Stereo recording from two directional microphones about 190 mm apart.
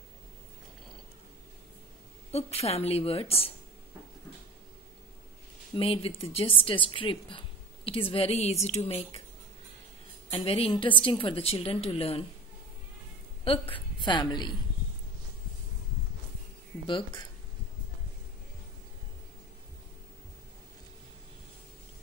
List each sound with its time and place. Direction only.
2.3 s a woman's voice: 35° left (ahead or behind)
5.8 s speech: 30° left (ahead or behind)
10.4 s speech: 30° left (ahead or behind)
13.7 s a woman's voice: 20° left (ahead or behind)
16.8 s speech: 25° left (ahead or behind)